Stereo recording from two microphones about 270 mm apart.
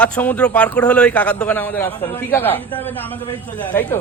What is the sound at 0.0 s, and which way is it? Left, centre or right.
A man's voice, centre.